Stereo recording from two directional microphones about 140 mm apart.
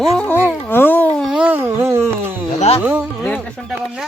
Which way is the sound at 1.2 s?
5° right (ahead or behind).